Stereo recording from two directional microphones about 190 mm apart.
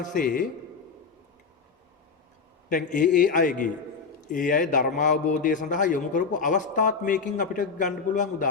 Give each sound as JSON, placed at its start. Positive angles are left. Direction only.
{"t": 0.2, "sound": "a man's voice", "side_deg": 45}
{"t": 2.6, "sound": "a man's voice", "side_deg": 45}